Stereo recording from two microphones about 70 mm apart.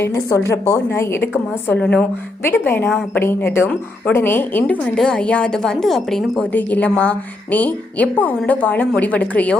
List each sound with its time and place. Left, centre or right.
0.0 s a woman's voice: left
1.7 s a woman's voice: centre
2.4 s a woman's voice: left
4.6 s a woman's voice: centre
6.5 s a woman's voice: left